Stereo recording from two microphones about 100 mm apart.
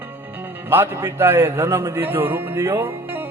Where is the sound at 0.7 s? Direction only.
20° right (ahead or behind).